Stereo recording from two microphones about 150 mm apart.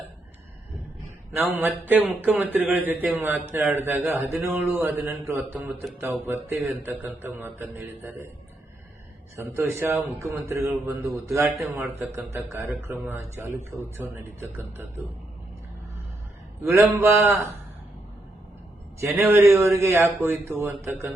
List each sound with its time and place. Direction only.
1.4 s a man's voice: 10° right (ahead or behind)
9.3 s a man's voice: 20° right (ahead or behind)
17.0 s a man's voice: 15° right (ahead or behind)
18.9 s a man's voice: 15° right (ahead or behind)